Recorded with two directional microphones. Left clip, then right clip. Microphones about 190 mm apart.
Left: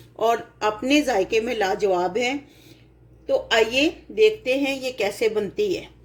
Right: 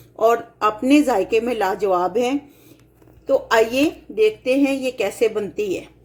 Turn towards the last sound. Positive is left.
turn(degrees=-35)  # may be behind; listen again after turning